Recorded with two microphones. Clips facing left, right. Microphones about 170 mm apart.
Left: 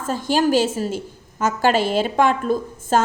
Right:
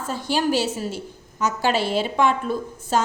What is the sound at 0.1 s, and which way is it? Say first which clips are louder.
A woman's voice: left 4 dB; 45° left (ahead or behind).